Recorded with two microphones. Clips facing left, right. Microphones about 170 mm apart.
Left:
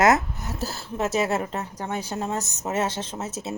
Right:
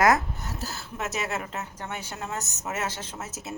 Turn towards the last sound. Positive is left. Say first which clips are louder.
# left 6 dB
turn(degrees=30)  # may be behind; listen again after turning